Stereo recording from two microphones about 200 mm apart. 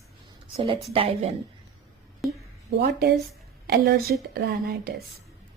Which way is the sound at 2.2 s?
Centre (ahead or behind).